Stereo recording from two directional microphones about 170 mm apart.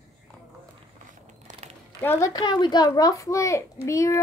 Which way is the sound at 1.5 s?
45° right (ahead or behind).